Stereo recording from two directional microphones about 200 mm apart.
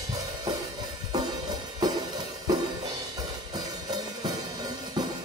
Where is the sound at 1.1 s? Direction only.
20° right (ahead or behind).